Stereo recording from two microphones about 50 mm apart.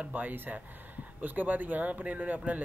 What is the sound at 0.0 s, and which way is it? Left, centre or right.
Speech, right.